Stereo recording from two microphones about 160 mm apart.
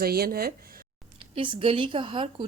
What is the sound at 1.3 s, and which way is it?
A woman's voice, 35° right (ahead or behind).